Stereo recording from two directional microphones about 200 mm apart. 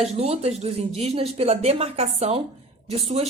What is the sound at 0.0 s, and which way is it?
Speech, 30° right (ahead or behind).